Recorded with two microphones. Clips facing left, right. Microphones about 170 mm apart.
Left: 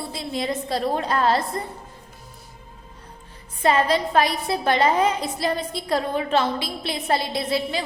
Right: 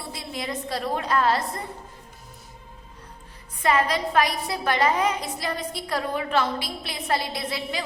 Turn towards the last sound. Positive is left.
turn(degrees=25)  # may be behind; listen again after turning